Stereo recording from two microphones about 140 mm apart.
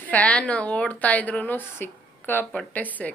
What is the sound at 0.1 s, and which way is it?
A woman's voice, 10° left (ahead or behind).